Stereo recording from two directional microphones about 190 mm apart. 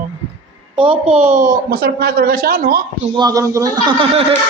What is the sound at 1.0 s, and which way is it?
Speech, 5° right (ahead or behind).